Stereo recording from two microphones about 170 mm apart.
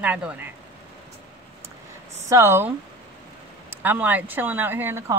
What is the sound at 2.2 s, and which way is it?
Speech, 20° right (ahead or behind).